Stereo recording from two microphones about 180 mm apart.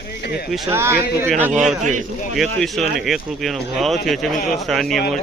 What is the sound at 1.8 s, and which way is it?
Speech, 45° right (ahead or behind).